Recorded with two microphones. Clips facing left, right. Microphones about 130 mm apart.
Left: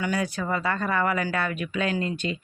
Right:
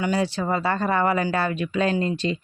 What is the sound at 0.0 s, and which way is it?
Speech, 25° right (ahead or behind).